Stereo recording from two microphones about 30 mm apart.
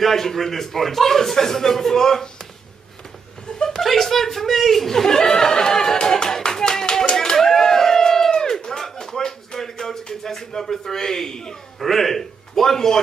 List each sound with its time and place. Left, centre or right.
0.0 s a man's voice: centre
3.7 s speech: centre
5.0 s chatter: left
5.9 s clapping: left
7.3 s a sound: centre
11.8 s a man's voice: centre